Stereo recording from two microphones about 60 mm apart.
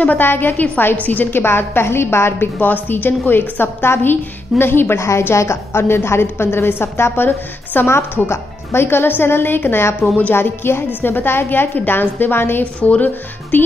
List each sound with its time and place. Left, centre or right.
0.0 s a woman's voice: left
5.3 s a woman's voice: left